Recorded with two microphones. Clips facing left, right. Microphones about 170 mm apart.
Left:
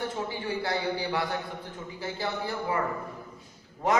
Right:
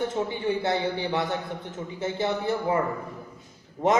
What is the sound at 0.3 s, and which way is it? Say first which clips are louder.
A man's voice: right 5 dB; 20° right (ahead or behind).